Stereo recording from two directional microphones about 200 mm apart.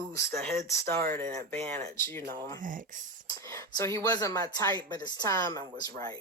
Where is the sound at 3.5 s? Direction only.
15° left (ahead or behind).